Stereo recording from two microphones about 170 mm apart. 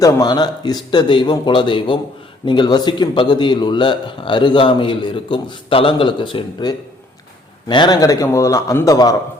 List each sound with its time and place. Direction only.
0.0 s speech: 20° left (ahead or behind)